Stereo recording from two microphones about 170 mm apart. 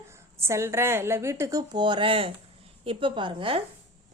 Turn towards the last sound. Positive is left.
turn(degrees=-30)  # may be behind; listen again after turning